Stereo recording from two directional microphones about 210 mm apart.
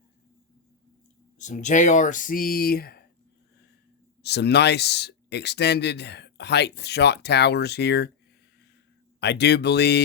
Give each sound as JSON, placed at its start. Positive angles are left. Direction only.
{"t": 1.4, "sound": "speech", "side_deg": 35}
{"t": 4.2, "sound": "speech", "side_deg": 50}
{"t": 9.2, "sound": "speech", "side_deg": 50}